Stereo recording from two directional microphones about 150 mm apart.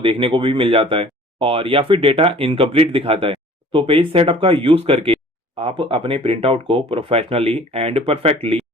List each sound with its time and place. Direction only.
0.0 s speech: 35° right (ahead or behind)